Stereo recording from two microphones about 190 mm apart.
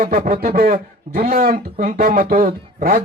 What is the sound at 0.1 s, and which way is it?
A man's voice, 50° right (ahead or behind).